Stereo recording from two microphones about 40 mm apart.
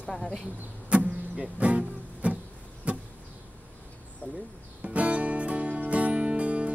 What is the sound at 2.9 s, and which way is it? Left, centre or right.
Vehicle, right.